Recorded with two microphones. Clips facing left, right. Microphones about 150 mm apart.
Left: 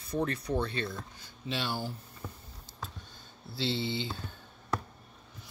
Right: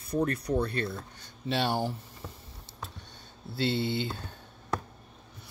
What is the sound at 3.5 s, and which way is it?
Speech, 55° right (ahead or behind).